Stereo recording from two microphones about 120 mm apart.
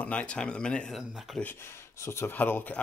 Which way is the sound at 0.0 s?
10° left (ahead or behind).